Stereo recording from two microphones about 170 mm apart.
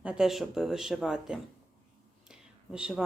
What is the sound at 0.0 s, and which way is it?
Speech, 5° right (ahead or behind).